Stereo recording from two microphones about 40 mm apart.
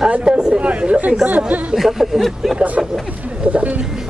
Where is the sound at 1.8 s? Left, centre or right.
Centre.